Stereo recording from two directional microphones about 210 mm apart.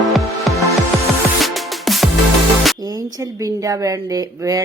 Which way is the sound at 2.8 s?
20° right (ahead or behind).